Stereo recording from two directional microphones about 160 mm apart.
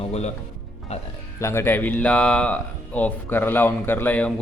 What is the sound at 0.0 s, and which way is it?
Music, 40° left (ahead or behind).